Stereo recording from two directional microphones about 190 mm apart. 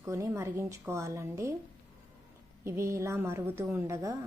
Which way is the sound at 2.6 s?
15° right (ahead or behind).